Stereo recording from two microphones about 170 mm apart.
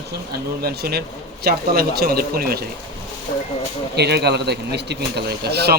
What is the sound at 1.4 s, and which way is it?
A man's voice, 65° right (ahead or behind).